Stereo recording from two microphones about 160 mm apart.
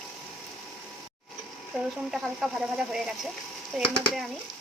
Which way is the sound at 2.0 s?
Centre (ahead or behind).